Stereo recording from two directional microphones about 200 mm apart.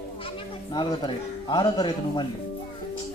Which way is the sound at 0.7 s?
20° left (ahead or behind).